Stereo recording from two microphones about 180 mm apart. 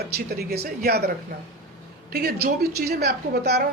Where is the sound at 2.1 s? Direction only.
60° right (ahead or behind).